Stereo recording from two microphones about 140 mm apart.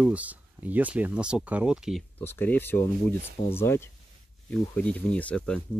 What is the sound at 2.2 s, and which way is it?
Speech, 15° left (ahead or behind).